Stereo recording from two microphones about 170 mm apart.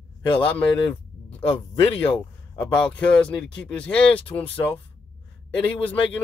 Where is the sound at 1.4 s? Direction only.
35° left (ahead or behind).